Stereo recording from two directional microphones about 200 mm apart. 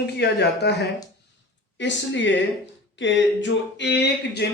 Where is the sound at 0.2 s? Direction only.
55° left (ahead or behind).